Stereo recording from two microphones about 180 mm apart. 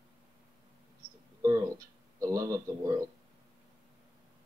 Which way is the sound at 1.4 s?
20° right (ahead or behind).